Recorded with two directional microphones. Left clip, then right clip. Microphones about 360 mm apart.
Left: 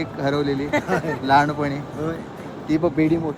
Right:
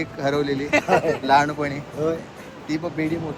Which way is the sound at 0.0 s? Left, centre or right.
Centre.